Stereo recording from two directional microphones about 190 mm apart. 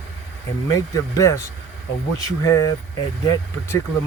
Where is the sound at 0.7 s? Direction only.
15° left (ahead or behind).